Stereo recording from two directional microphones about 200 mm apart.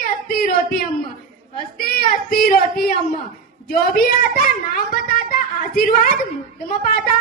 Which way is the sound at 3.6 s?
45° left (ahead or behind).